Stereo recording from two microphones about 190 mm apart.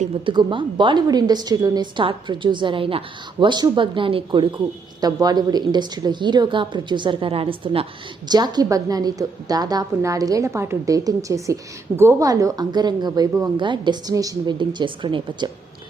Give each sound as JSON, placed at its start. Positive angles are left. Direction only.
{"t": 0.3, "sound": "a woman's voice", "side_deg": -25}